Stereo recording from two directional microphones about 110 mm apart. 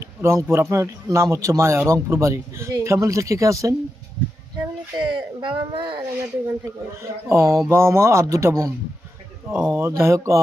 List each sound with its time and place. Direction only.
0.0 s speech: 25° right (ahead or behind)
4.9 s speech: 50° right (ahead or behind)
7.3 s speech: 25° right (ahead or behind)
9.5 s speech: 15° right (ahead or behind)